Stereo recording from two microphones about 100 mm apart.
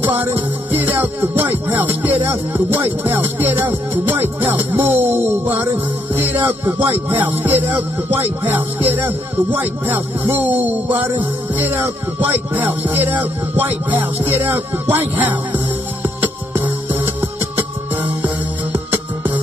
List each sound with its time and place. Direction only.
0.0 s music: 20° right (ahead or behind)
18.7 s music: 20° right (ahead or behind)